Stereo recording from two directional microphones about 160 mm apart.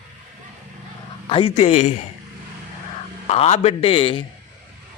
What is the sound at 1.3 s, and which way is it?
Speech, 35° left (ahead or behind).